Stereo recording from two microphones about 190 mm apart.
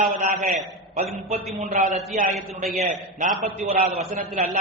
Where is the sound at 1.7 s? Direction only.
45° right (ahead or behind).